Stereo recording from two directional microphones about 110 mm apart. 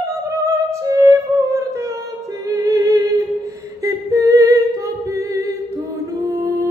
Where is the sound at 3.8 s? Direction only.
30° right (ahead or behind).